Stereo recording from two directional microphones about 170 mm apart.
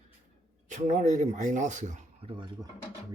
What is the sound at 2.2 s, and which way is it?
Speech, 30° right (ahead or behind).